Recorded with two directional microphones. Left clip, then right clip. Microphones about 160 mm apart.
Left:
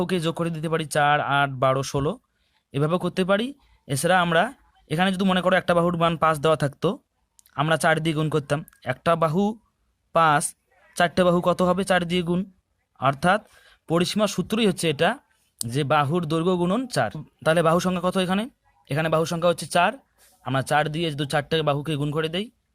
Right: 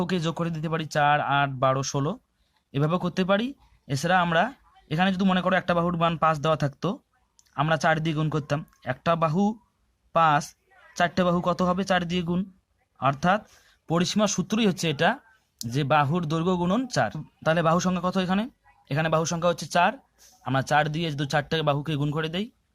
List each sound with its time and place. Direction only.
0.0 s speech: 35° left (ahead or behind)